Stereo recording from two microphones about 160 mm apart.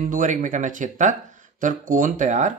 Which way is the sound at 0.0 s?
55° right (ahead or behind).